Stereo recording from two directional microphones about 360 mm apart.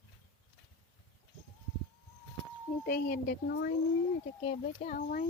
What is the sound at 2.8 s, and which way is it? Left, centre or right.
Speech, left.